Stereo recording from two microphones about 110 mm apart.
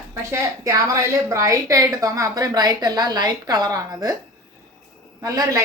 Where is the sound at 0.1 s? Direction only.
30° right (ahead or behind).